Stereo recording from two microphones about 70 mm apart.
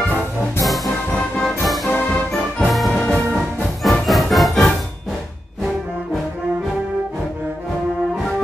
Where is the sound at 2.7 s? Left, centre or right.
Centre.